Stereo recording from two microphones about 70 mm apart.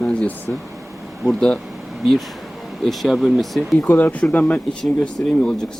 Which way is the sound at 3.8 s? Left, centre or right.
Left.